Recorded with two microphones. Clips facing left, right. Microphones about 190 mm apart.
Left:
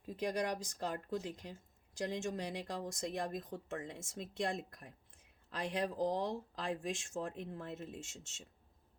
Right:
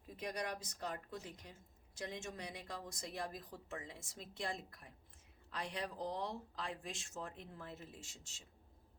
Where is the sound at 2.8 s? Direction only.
45° left (ahead or behind).